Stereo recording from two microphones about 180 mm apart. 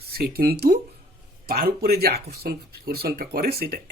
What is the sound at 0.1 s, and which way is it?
Speech, 60° right (ahead or behind).